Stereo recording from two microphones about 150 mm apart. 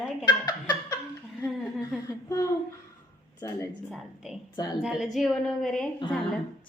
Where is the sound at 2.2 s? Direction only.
20° left (ahead or behind).